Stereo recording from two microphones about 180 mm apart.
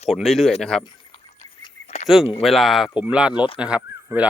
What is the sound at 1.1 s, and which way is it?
Duck, 30° left (ahead or behind).